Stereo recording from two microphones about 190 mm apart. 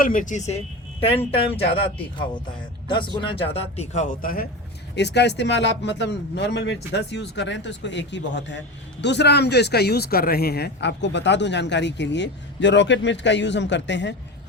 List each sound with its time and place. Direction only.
0.0 s a woman's voice: 45° left (ahead or behind)
2.8 s speech: 25° left (ahead or behind); by 4.4 s 50° left (ahead or behind)
4.9 s a man's voice: 65° left (ahead or behind)